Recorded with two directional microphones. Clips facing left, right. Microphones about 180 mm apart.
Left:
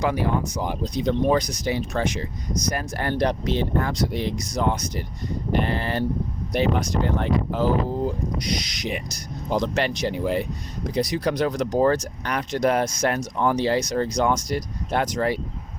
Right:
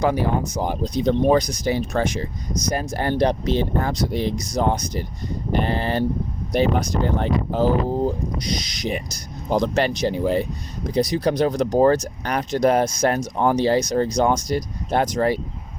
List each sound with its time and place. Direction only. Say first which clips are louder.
0.0 s speech: right 3 dB; 40° right (ahead or behind)
2.7 s speech: right 6 dB; 30° right (ahead or behind)
9.5 s speech: right 3 dB; 40° right (ahead or behind)
11.5 s speech: right 4 dB; 40° right (ahead or behind)